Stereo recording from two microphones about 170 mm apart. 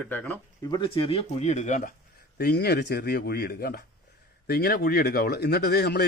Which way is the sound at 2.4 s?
70° left (ahead or behind).